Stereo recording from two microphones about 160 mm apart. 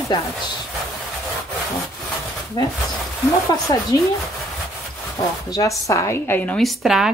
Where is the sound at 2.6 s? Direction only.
25° left (ahead or behind).